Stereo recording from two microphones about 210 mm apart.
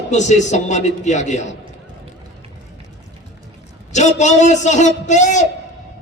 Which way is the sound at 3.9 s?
35° left (ahead or behind).